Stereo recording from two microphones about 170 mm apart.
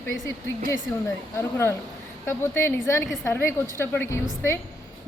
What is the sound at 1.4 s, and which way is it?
A woman's voice, 15° left (ahead or behind).